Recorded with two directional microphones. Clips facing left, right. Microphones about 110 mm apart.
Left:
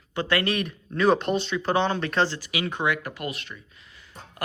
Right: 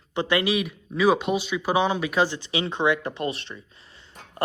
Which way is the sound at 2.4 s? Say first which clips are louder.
Right 3 dB; 25° right (ahead or behind).